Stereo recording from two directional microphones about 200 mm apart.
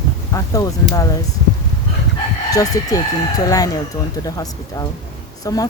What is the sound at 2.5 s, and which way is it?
Speech, 15° left (ahead or behind).